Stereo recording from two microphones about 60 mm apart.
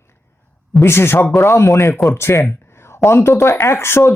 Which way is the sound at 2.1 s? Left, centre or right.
Left.